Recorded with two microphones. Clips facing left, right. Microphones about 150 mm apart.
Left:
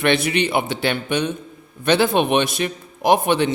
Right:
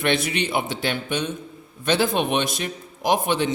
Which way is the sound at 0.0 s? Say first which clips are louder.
Left 4 dB; 70° left (ahead or behind).